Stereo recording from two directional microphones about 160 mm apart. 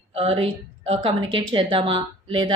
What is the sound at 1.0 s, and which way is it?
A woman's voice, 30° right (ahead or behind).